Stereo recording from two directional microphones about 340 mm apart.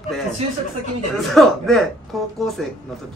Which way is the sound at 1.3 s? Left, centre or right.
Centre.